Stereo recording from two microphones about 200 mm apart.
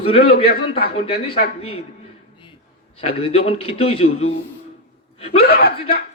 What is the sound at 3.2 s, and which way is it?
A man's voice, 30° left (ahead or behind).